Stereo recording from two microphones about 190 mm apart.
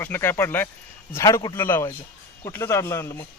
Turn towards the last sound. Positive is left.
turn(degrees=15)  # may be behind; listen again after turning